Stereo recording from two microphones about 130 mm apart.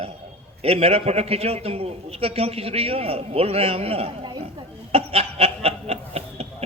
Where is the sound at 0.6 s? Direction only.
50° right (ahead or behind).